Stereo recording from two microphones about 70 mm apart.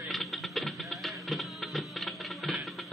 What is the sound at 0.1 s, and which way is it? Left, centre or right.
Music, centre.